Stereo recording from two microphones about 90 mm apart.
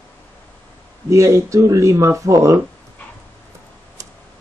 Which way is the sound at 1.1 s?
35° right (ahead or behind).